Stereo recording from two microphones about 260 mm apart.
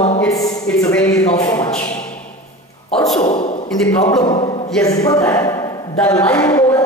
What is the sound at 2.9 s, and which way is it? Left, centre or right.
Speech, centre.